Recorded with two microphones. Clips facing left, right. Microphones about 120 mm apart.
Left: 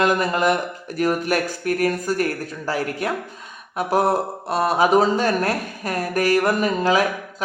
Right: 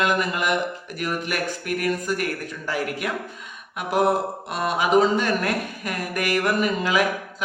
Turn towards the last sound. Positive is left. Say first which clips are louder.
# left 3 dB
turn(degrees=35)  # may be behind; listen again after turning